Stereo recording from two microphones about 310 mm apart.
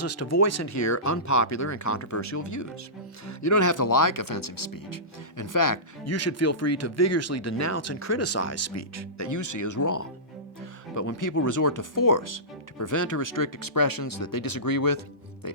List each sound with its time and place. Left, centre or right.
0.0 s speech: left
6.1 s speech: left
12.8 s speech: left